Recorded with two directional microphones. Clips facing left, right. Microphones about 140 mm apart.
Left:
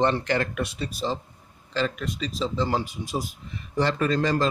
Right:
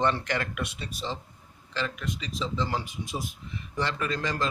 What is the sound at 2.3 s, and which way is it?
A man's voice, 35° left (ahead or behind).